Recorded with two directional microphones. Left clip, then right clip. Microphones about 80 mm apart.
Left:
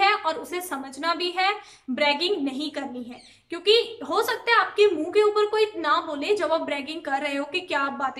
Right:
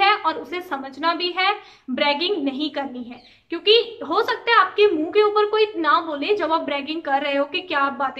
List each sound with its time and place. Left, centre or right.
0.0 s a woman's voice: left